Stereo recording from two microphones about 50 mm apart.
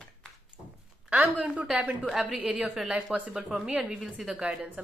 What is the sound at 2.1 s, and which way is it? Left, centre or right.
Speech, centre.